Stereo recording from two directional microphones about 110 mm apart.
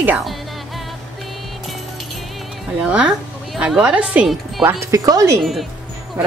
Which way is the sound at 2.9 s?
10° right (ahead or behind).